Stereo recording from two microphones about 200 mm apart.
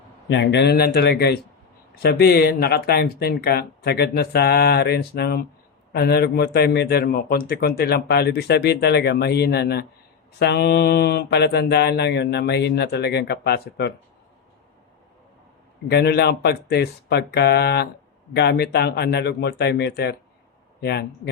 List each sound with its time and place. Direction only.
0.3 s mantra: 60° left (ahead or behind)
2.0 s a man's voice: 50° left (ahead or behind)
10.3 s mantra: 55° left (ahead or behind)
15.9 s mantra: 55° left (ahead or behind)
18.3 s a man's voice: 55° left (ahead or behind)